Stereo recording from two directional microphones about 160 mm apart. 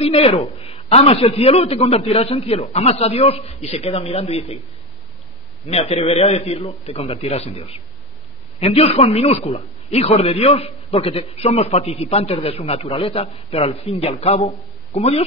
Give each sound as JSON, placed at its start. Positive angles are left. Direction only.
{"t": 0.0, "sound": "a man's voice", "side_deg": 40}
{"t": 5.7, "sound": "a man's voice", "side_deg": 40}